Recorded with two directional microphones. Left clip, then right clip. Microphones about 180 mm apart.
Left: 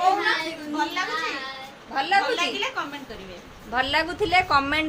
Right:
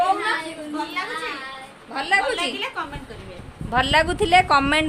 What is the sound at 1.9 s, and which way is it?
Speech, 45° right (ahead or behind).